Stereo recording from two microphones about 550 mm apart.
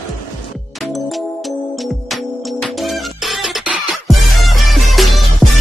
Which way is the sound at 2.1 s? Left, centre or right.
Centre.